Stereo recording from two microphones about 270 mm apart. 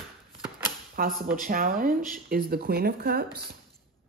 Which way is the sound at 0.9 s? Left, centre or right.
Right.